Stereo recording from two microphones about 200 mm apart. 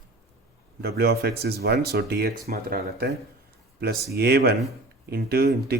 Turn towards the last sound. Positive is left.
turn(degrees=-50)  # may be behind; listen again after turning